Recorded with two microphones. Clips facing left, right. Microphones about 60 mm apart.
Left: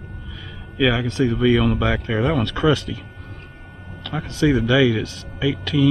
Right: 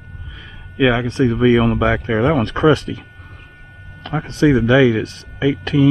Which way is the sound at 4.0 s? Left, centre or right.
Right.